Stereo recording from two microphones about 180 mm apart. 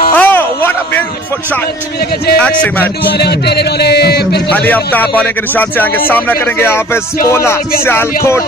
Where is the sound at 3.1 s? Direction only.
65° left (ahead or behind).